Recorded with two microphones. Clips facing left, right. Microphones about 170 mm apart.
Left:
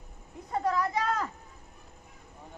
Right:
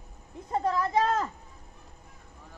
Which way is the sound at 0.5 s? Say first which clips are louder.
Right 1 dB; 30° right (ahead or behind).